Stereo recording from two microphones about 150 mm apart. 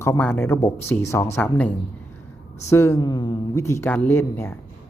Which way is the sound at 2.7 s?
20° left (ahead or behind).